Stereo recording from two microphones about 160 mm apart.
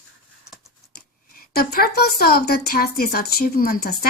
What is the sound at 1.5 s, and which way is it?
Speech, 70° left (ahead or behind).